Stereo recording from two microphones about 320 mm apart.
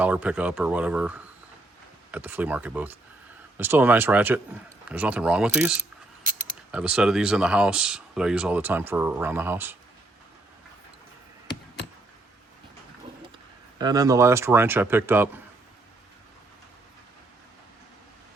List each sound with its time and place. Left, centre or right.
0.0 s speech: centre
6.2 s mechanisms: right
6.7 s speech: centre
13.7 s speech: centre